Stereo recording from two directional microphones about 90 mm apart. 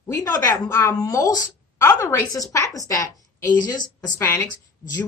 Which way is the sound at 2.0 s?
30° left (ahead or behind).